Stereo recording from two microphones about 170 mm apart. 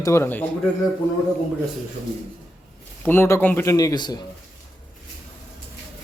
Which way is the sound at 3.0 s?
15° left (ahead or behind).